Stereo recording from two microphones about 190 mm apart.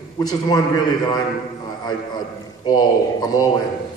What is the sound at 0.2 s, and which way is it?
A man's voice, 20° left (ahead or behind).